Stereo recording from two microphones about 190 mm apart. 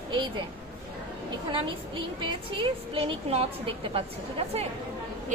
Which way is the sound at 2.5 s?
30° right (ahead or behind).